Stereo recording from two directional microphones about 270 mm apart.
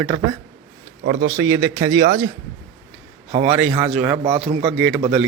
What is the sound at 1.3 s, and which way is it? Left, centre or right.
Speech, centre.